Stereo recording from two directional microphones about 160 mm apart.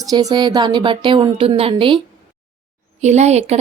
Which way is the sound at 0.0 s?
25° right (ahead or behind).